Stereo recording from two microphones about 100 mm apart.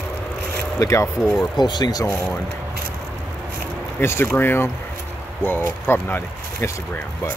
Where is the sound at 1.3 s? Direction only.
45° left (ahead or behind).